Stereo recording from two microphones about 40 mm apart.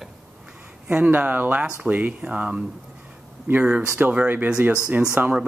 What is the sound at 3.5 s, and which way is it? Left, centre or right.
Speech, right.